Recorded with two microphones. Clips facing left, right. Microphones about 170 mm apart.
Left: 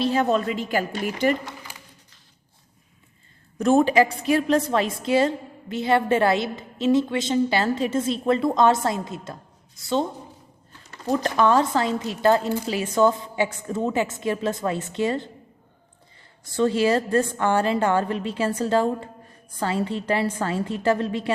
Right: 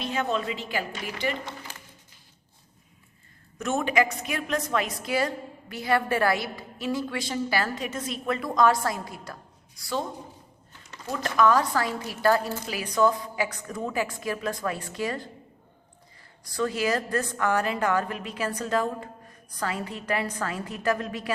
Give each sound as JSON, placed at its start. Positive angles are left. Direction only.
{"t": 0.0, "sound": "speech", "side_deg": 35}
{"t": 3.6, "sound": "a woman's voice", "side_deg": 35}
{"t": 11.0, "sound": "a woman's voice", "side_deg": 35}
{"t": 16.4, "sound": "a woman's voice", "side_deg": 25}